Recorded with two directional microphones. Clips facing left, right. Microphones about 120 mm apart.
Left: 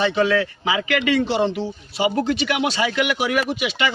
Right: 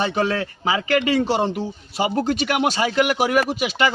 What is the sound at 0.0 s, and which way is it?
Speech, 40° right (ahead or behind).